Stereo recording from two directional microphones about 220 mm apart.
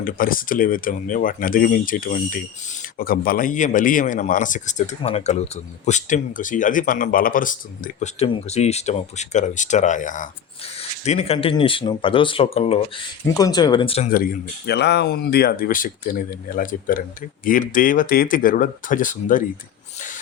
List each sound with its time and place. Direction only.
0.0 s speech: 40° left (ahead or behind)
13.2 s speech: 15° left (ahead or behind)
14.7 s speech: 50° left (ahead or behind)